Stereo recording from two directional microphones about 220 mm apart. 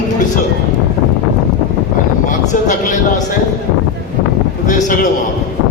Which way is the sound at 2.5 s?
35° left (ahead or behind).